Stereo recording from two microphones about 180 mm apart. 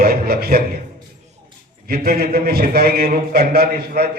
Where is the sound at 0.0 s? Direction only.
55° right (ahead or behind).